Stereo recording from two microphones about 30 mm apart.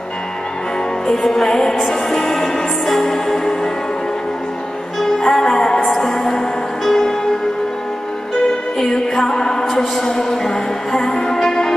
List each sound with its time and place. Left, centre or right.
1.0 s music: centre
5.2 s music: centre
6.8 s music: centre
8.7 s music: centre